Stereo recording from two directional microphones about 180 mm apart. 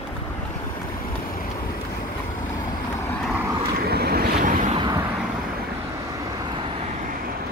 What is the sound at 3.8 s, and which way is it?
Waves, 60° right (ahead or behind).